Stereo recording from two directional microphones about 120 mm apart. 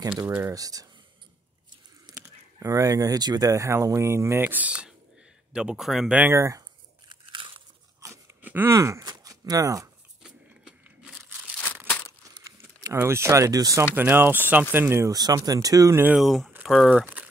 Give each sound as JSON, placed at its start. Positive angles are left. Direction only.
{"t": 0.5, "sound": "speech", "side_deg": -30}
{"t": 2.0, "sound": "speech", "side_deg": -30}
{"t": 6.1, "sound": "speech", "side_deg": -20}
{"t": 7.1, "sound": "crunch", "side_deg": -40}
{"t": 8.0, "sound": "crunch", "side_deg": -25}
{"t": 8.4, "sound": "a sound", "side_deg": -15}
{"t": 9.0, "sound": "speech", "side_deg": -30}
{"t": 10.2, "sound": "crunch", "side_deg": -5}
{"t": 11.5, "sound": "crumpling", "side_deg": 15}
{"t": 12.8, "sound": "speech", "side_deg": -20}
{"t": 13.9, "sound": "speech", "side_deg": -20}
{"t": 16.2, "sound": "speech", "side_deg": 0}